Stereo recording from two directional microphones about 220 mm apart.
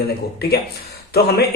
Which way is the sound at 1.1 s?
45° left (ahead or behind).